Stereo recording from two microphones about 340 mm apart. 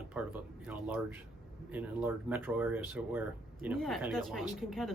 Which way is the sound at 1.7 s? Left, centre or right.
Centre.